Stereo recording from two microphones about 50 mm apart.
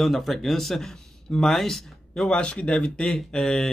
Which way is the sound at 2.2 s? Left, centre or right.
Centre.